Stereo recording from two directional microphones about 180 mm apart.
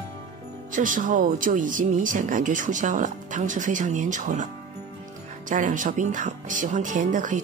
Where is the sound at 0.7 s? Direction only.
45° right (ahead or behind).